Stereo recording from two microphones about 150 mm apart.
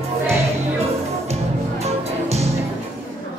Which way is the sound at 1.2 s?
45° right (ahead or behind).